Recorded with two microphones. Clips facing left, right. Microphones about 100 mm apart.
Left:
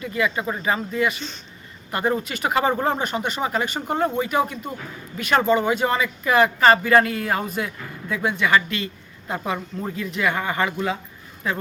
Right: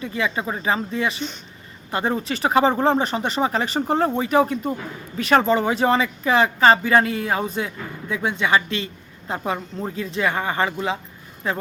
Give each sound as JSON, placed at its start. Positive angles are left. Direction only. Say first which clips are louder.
{"t": 0.0, "sound": "speech", "louder": "left 1 dB", "side_deg": -25}